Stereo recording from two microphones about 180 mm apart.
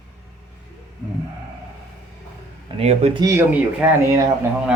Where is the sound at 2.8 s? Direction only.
35° right (ahead or behind).